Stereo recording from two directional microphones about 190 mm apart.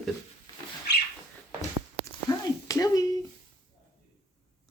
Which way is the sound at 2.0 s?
20° left (ahead or behind).